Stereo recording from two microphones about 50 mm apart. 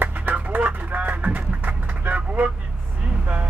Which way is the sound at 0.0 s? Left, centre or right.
Right.